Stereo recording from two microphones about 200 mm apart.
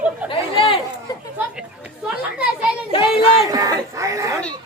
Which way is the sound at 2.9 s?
25° left (ahead or behind).